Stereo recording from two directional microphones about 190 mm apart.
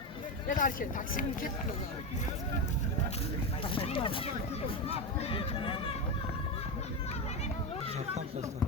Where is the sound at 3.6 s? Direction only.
25° left (ahead or behind).